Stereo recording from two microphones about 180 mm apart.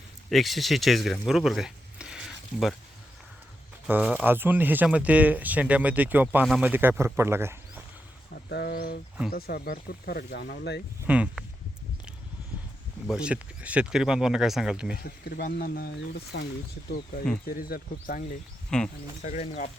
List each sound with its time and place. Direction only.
0.3 s speech: centre (ahead or behind)
3.8 s speech: 10° right (ahead or behind)
8.4 s speech: 65° left (ahead or behind)
11.0 s speech: 5° right (ahead or behind)
13.1 s speech: 5° right (ahead or behind)
15.0 s speech: 60° left (ahead or behind)
16.3 s speech: 70° left (ahead or behind)
17.4 s speech: 55° left (ahead or behind)
18.7 s speech: 5° left (ahead or behind)
19.2 s speech: 40° left (ahead or behind)